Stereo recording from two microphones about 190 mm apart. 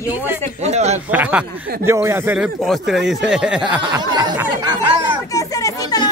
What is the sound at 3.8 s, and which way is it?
Snicker, 20° right (ahead or behind).